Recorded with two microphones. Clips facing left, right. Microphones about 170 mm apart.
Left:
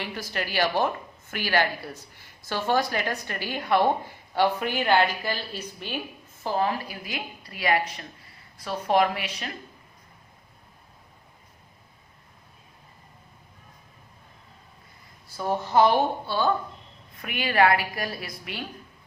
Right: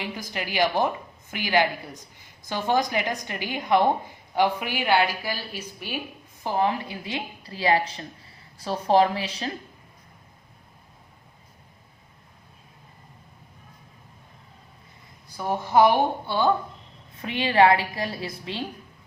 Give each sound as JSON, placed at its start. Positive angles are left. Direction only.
{"t": 0.0, "sound": "a woman's voice", "side_deg": -15}
{"t": 15.3, "sound": "a woman's voice", "side_deg": -15}